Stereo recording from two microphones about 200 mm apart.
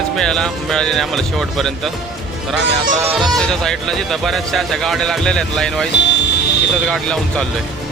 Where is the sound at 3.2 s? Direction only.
Centre (ahead or behind).